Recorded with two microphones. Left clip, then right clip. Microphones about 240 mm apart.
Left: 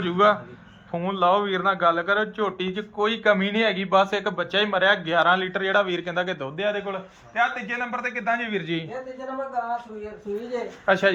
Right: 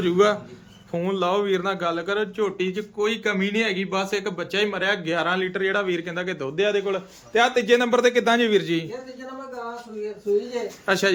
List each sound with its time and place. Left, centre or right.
0.0 s a man's voice: centre
10.8 s a man's voice: centre